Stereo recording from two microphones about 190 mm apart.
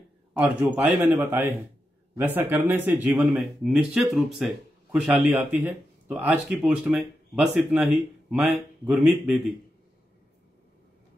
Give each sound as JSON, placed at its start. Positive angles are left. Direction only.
{"t": 0.3, "sound": "speech", "side_deg": -10}